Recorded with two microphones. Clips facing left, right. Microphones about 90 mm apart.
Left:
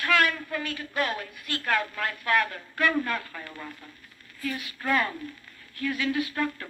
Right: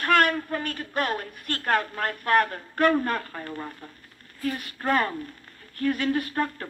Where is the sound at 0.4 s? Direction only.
45° right (ahead or behind).